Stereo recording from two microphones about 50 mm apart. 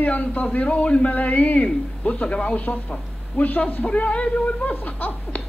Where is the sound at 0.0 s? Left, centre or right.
Left.